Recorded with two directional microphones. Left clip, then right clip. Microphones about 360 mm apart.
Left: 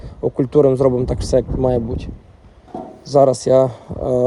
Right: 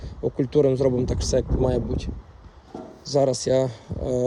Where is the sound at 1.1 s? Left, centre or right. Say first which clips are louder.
Left 5 dB; centre.